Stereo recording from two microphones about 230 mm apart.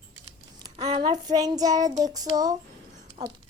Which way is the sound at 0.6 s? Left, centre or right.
Right.